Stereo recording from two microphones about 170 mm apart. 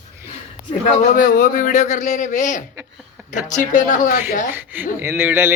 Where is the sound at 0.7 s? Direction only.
50° left (ahead or behind).